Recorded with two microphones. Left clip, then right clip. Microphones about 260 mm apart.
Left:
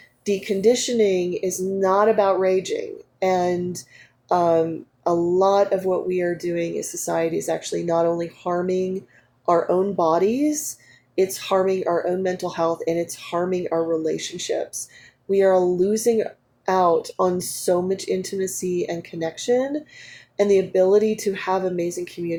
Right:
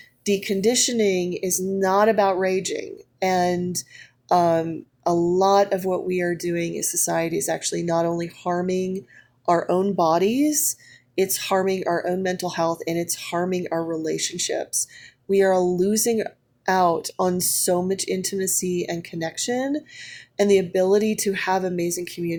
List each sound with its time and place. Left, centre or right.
0.3 s speech: right